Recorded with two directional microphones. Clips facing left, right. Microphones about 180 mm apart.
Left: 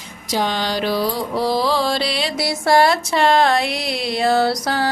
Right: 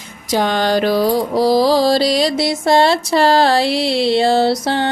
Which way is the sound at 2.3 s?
20° right (ahead or behind).